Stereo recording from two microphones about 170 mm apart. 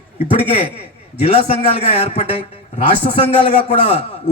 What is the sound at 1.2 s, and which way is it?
A man's voice, 35° left (ahead or behind).